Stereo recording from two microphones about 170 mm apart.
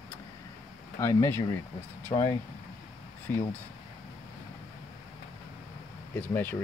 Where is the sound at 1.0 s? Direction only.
15° left (ahead or behind).